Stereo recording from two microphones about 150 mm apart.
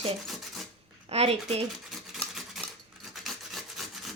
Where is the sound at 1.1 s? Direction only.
40° right (ahead or behind).